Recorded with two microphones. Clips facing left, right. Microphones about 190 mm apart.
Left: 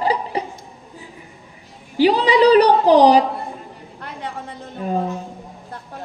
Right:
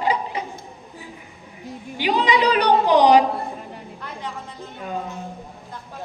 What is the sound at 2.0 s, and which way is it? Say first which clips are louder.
Speech: left 6 dB; 35° left (ahead or behind).